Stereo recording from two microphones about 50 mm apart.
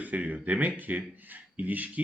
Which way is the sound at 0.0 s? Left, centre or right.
Right.